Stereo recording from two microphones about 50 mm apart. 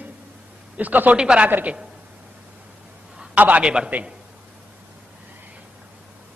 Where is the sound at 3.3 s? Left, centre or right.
Right.